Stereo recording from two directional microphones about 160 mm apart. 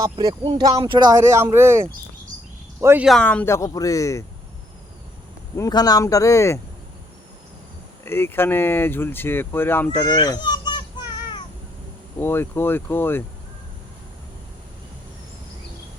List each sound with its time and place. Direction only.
0.0 s speech: 25° right (ahead or behind)
3.1 s speech: 5° left (ahead or behind)
5.5 s speech: 25° left (ahead or behind)
8.0 s speech: 15° left (ahead or behind)
10.2 s children playing: 25° left (ahead or behind)
12.2 s speech: 15° left (ahead or behind)